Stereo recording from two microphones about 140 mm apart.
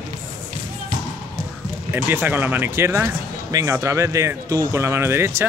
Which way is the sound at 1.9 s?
15° right (ahead or behind).